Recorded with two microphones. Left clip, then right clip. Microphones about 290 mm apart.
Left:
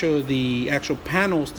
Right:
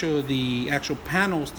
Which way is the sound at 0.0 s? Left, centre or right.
Centre.